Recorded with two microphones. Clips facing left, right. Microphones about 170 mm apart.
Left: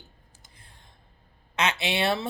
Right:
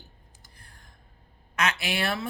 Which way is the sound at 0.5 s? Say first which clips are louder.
Even; 25° left (ahead or behind).